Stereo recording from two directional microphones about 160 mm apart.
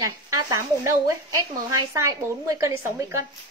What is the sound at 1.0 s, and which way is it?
Speech, 20° right (ahead or behind).